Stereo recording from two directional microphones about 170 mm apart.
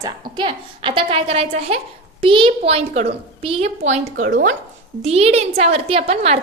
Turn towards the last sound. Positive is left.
turn(degrees=-35)  # may be behind; listen again after turning